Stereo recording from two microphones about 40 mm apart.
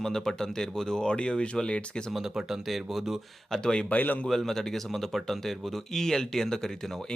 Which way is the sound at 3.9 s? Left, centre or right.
Left.